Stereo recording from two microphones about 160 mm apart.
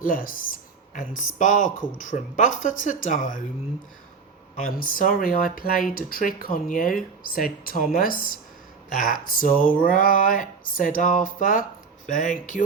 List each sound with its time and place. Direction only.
0.0 s speech: 60° left (ahead or behind)
4.6 s speech: 60° left (ahead or behind)